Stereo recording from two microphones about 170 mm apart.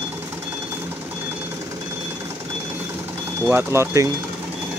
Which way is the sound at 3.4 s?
15° right (ahead or behind).